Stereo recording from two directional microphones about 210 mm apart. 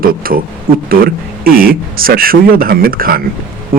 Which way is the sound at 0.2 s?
45° right (ahead or behind).